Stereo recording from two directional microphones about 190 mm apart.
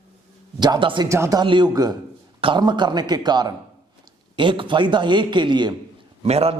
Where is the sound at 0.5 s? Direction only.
20° right (ahead or behind).